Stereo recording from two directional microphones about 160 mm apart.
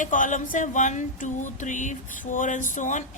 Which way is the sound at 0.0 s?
55° left (ahead or behind).